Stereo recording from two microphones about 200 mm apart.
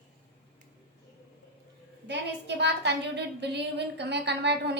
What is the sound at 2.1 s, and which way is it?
A woman's voice, 60° right (ahead or behind).